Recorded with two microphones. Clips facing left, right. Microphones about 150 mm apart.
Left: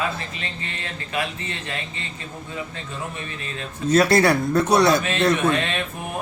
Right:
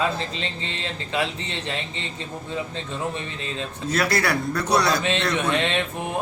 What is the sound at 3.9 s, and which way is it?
Speech, 25° left (ahead or behind).